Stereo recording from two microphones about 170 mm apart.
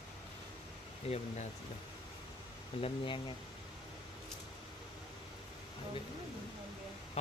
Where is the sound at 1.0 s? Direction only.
40° left (ahead or behind).